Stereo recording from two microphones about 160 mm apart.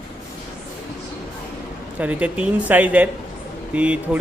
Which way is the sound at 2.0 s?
10° right (ahead or behind).